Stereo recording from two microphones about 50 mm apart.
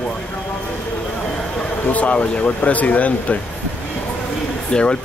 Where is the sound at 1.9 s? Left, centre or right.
Left.